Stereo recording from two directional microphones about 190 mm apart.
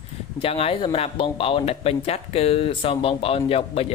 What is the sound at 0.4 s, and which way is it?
Speech, 30° left (ahead or behind).